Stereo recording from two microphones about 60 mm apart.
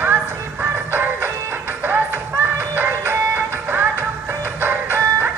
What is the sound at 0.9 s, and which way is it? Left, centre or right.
Music, right.